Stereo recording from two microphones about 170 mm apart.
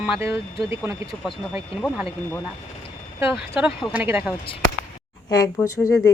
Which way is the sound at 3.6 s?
10° right (ahead or behind).